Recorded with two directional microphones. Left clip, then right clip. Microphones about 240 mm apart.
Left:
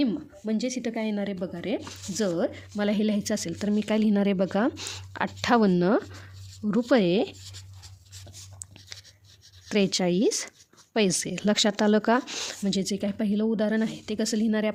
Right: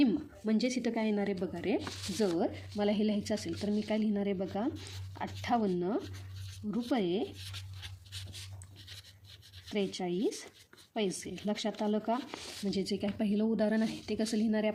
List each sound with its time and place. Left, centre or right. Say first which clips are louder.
0.0 s speech: left 2 dB; centre
2.1 s speech: left 5 dB; left
9.6 s speech: left 10 dB; left